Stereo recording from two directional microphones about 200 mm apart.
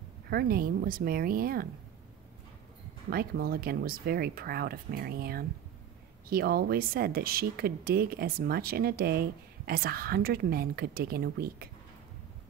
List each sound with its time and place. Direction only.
0.3 s speech: 50° right (ahead or behind)
3.1 s speech: 50° right (ahead or behind)